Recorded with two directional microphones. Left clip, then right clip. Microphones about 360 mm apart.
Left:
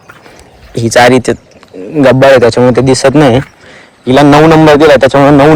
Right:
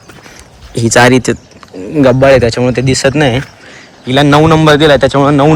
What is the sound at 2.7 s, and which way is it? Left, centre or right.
A man's voice, centre.